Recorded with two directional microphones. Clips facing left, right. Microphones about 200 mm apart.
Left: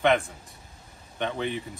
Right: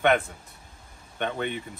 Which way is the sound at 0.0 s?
Centre (ahead or behind).